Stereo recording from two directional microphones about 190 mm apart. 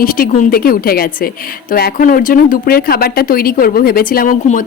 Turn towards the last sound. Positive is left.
turn(degrees=45)  # may be behind; listen again after turning